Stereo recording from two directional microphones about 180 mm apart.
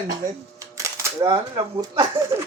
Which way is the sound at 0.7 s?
15° right (ahead or behind).